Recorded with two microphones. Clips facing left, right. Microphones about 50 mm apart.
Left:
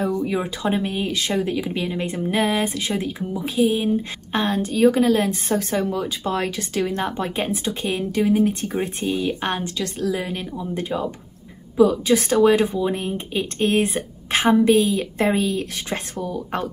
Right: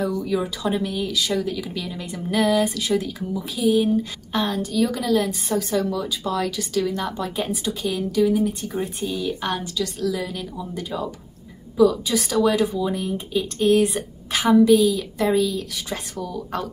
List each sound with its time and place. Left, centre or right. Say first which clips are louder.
0.0 s speech: left 1 dB; left